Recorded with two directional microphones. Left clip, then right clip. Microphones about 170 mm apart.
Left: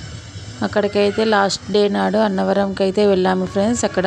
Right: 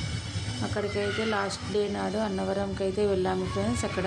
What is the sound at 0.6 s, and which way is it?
Speech, 60° left (ahead or behind).